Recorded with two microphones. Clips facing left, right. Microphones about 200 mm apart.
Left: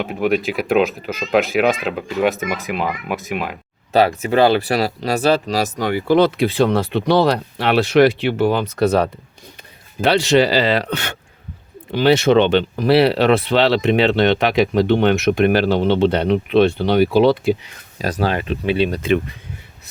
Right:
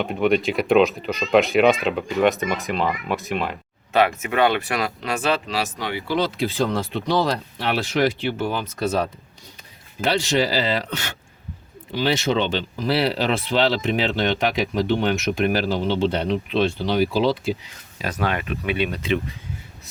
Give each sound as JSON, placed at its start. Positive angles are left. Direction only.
{"t": 0.0, "sound": "speech", "side_deg": 5}
{"t": 3.9, "sound": "speech", "side_deg": 35}
{"t": 18.0, "sound": "speech", "side_deg": 35}